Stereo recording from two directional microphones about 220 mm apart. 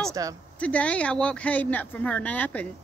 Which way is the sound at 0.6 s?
5° left (ahead or behind).